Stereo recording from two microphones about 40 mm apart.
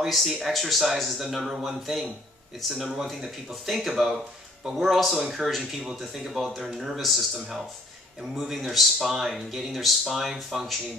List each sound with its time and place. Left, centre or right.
0.0 s speech: centre
8.5 s speech: centre